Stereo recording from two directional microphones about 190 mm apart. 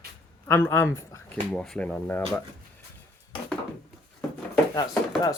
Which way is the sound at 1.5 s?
5° left (ahead or behind).